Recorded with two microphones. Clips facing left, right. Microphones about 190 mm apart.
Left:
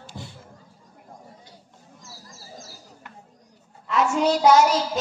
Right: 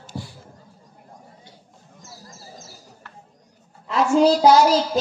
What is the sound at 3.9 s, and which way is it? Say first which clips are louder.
A woman's voice: right 5 dB; 35° right (ahead or behind).